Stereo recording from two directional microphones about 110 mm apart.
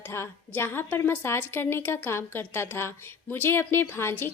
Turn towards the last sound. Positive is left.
turn(degrees=20)  # may be behind; listen again after turning